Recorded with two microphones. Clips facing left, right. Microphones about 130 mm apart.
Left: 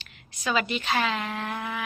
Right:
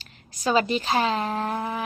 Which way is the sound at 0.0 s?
35° right (ahead or behind).